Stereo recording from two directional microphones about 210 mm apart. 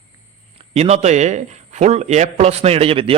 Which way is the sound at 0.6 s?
30° right (ahead or behind).